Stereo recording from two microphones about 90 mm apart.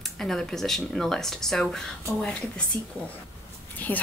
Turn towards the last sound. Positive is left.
turn(degrees=20)  # may be behind; listen again after turning